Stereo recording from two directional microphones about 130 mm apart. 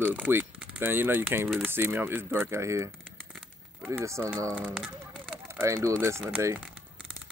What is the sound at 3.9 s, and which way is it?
Speech, 20° right (ahead or behind).